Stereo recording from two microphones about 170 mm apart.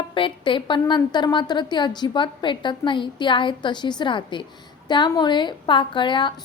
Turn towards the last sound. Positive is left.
turn(degrees=30)  # may be behind; listen again after turning